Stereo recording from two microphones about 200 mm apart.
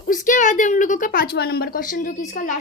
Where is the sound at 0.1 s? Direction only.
40° left (ahead or behind).